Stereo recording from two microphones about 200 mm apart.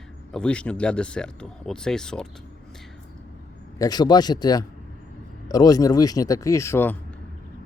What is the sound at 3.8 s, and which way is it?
Speech, 20° left (ahead or behind).